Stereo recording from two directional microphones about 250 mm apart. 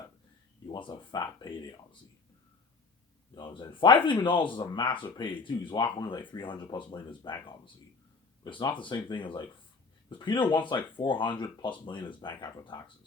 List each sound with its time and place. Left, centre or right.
0.7 s speech: centre
3.3 s speech: centre